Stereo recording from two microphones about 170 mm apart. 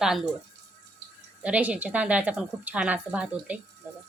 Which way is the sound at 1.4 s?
10° right (ahead or behind).